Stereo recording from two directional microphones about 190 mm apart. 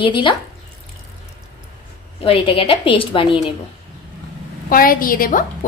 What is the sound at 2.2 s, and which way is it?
A woman's voice, 30° left (ahead or behind).